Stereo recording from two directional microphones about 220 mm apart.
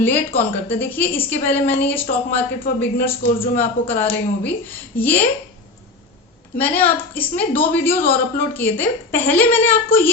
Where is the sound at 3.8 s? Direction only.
60° left (ahead or behind).